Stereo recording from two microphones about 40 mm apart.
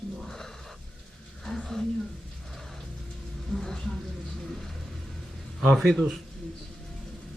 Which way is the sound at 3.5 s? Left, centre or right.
Centre.